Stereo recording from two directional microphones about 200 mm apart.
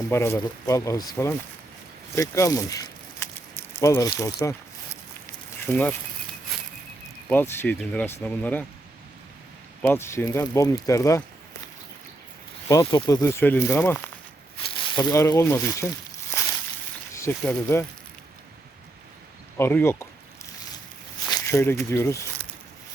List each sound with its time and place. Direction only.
0.1 s speech: 15° left (ahead or behind)
2.1 s a sound: 15° left (ahead or behind)
7.3 s speech: 10° left (ahead or behind)
9.8 s speech: 10° left (ahead or behind)
12.8 s speech: 20° left (ahead or behind)
16.4 s a sound: 15° left (ahead or behind)
17.2 s speech: 15° left (ahead or behind)
19.5 s speech: 10° left (ahead or behind)
21.2 s speech: 15° left (ahead or behind)